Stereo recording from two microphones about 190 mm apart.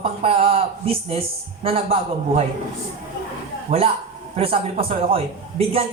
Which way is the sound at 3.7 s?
30° right (ahead or behind).